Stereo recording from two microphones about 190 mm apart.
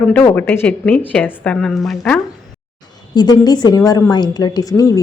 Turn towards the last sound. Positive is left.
turn(degrees=15)  # may be behind; listen again after turning